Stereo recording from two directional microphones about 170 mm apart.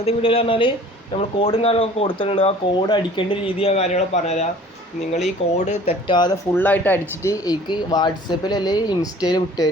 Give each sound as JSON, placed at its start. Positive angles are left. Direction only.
{"t": 0.0, "sound": "speech", "side_deg": 35}
{"t": 6.5, "sound": "speech", "side_deg": 10}